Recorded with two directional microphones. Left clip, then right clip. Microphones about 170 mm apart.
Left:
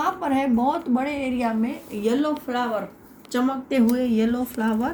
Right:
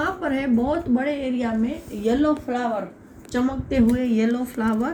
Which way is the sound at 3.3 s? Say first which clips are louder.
Left 1 dB; 45° left (ahead or behind).